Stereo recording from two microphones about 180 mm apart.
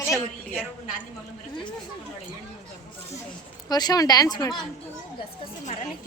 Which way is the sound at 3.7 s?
20° left (ahead or behind).